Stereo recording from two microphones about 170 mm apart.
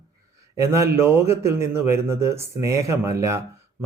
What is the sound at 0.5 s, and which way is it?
Speech, 15° right (ahead or behind).